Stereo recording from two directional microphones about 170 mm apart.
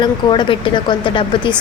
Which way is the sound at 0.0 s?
30° left (ahead or behind).